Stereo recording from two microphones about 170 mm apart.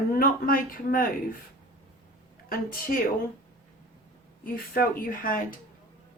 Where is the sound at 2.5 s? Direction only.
55° left (ahead or behind).